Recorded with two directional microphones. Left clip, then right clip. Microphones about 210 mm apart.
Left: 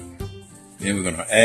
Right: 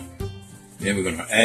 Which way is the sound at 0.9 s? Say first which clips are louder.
Left 1 dB; 60° left (ahead or behind).